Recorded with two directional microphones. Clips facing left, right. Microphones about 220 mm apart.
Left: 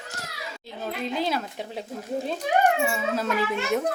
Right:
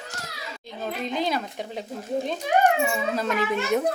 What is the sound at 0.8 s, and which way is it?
Speech, 5° left (ahead or behind).